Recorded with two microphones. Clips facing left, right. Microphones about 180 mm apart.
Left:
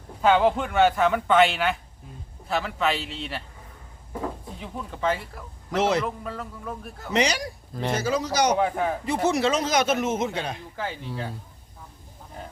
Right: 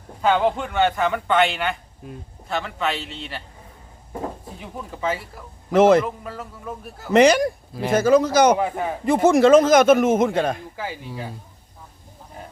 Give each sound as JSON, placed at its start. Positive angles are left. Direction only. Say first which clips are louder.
{"t": 0.2, "sound": "speech", "louder": "even", "side_deg": 0}
{"t": 2.0, "sound": "a man's voice", "louder": "right 10 dB", "side_deg": -70}
{"t": 2.5, "sound": "speech", "louder": "even", "side_deg": 0}
{"t": 4.6, "sound": "speech", "louder": "even", "side_deg": -5}
{"t": 5.7, "sound": "a man's voice", "louder": "right 9 dB", "side_deg": -50}
{"t": 6.1, "sound": "speech", "louder": "right 1 dB", "side_deg": -5}
{"t": 7.1, "sound": "a man's voice", "louder": "right 10 dB", "side_deg": -50}
{"t": 7.7, "sound": "speech", "louder": "right 3 dB", "side_deg": -5}
{"t": 7.9, "sound": "a man's voice", "louder": "right 10 dB", "side_deg": -50}
{"t": 8.5, "sound": "speech", "louder": "even", "side_deg": -5}
{"t": 9.0, "sound": "a man's voice", "louder": "right 11 dB", "side_deg": -50}
{"t": 10.8, "sound": "speech", "louder": "right 1 dB", "side_deg": -10}